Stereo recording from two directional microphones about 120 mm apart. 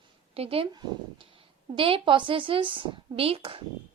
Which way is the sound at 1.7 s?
45° right (ahead or behind).